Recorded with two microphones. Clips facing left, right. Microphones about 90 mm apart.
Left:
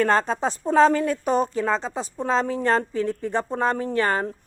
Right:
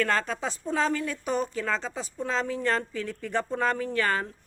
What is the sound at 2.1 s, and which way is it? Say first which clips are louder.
A woman's voice: left 6 dB; 40° left (ahead or behind).